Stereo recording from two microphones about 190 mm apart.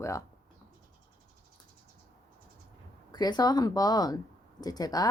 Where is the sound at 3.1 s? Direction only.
20° left (ahead or behind).